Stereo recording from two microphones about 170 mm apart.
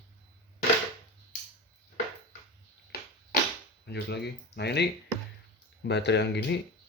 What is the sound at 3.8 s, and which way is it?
Speech, 75° left (ahead or behind).